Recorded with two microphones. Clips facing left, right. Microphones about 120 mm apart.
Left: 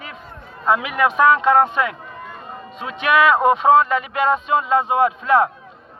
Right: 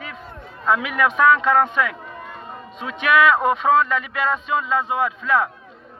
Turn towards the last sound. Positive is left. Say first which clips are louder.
# left 5 dB
turn(degrees=20)  # may be behind; listen again after turning